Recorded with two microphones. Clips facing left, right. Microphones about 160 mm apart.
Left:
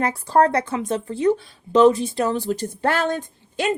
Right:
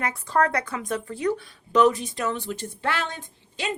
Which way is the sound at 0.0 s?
35° left (ahead or behind).